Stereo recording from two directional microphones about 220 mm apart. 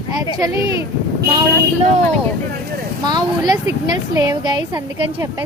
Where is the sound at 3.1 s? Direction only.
20° right (ahead or behind).